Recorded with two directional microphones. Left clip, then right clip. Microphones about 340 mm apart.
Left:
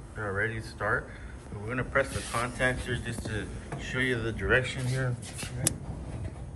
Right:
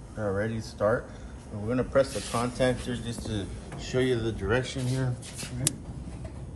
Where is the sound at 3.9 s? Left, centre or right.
Centre.